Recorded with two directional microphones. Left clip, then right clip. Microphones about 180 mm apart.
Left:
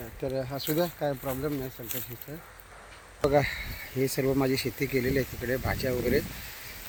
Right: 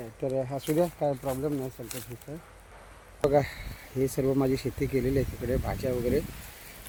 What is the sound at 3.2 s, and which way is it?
Speech, 5° right (ahead or behind).